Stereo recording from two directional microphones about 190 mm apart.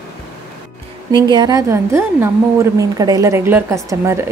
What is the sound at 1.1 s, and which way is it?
A woman's voice, 20° right (ahead or behind).